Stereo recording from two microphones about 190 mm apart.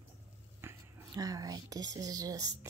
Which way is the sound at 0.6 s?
20° right (ahead or behind).